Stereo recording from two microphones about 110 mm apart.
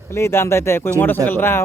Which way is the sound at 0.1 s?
25° left (ahead or behind).